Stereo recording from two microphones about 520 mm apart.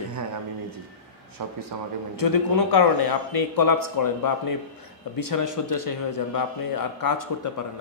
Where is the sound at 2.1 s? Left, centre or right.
Left.